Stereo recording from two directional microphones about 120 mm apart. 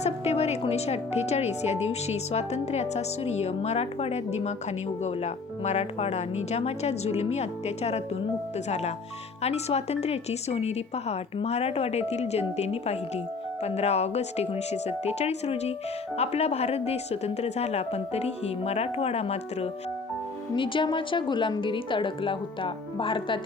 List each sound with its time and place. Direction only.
0.0 s a woman's voice: 60° left (ahead or behind)
20.6 s a woman's voice: 45° left (ahead or behind)